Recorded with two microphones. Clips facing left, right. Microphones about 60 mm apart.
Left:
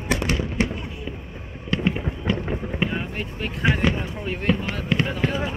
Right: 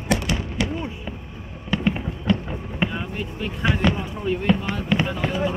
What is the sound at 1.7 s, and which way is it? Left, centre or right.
Fireworks, centre.